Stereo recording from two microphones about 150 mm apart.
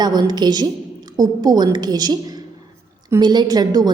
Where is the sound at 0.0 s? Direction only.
25° right (ahead or behind).